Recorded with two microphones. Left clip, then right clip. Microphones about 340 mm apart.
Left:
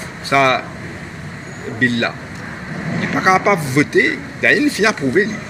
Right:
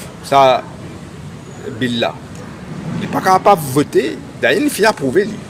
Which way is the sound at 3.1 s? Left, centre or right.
Right.